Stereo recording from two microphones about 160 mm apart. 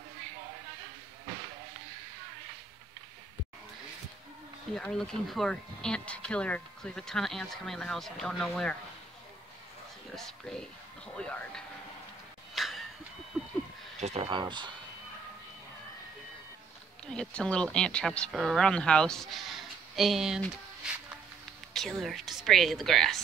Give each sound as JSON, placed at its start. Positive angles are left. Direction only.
{"t": 4.7, "sound": "speech", "side_deg": 5}
{"t": 10.1, "sound": "speech", "side_deg": 5}
{"t": 12.5, "sound": "a sound", "side_deg": 0}
{"t": 13.9, "sound": "speech", "side_deg": -40}
{"t": 17.0, "sound": "speech", "side_deg": 5}